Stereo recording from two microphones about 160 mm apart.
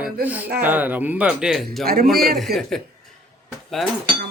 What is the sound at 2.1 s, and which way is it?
Speech, 70° right (ahead or behind).